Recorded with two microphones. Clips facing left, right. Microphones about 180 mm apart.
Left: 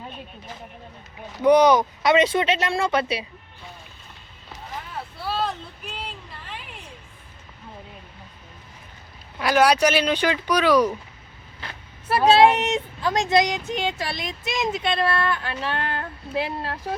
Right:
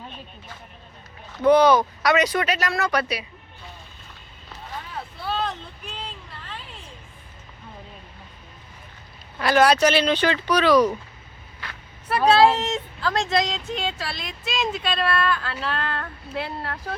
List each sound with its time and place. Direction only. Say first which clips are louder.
1.4 s speech: even; 15° left (ahead or behind)
5.2 s a sound: left 1 dB; 5° left (ahead or behind)
9.4 s speech: right 1 dB; 10° left (ahead or behind)
11.6 s speech: left 2 dB; 25° left (ahead or behind)